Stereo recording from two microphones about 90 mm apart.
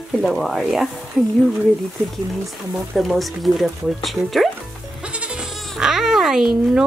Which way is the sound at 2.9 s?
Centre (ahead or behind).